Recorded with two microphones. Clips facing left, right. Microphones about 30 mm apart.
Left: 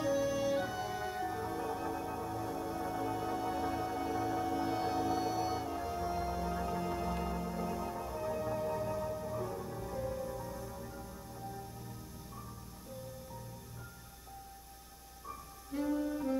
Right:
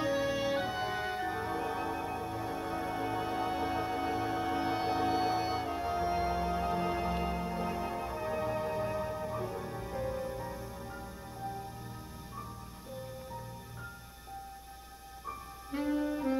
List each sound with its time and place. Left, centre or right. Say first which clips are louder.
0.0 s music: right 1 dB; right
15.2 s music: right 4 dB; right